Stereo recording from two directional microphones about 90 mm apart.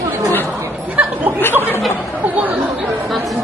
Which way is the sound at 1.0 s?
15° right (ahead or behind).